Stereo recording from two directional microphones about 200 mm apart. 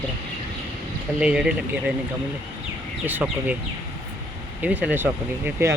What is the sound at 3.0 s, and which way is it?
Speech, 10° right (ahead or behind).